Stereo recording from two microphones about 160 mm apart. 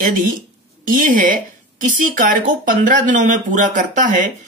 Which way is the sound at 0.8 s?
55° right (ahead or behind).